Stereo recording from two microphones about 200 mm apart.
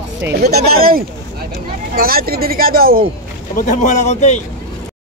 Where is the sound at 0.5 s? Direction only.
50° right (ahead or behind).